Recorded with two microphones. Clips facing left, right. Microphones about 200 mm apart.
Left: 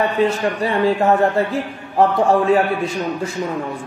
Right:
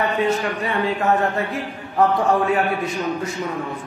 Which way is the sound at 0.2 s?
30° left (ahead or behind).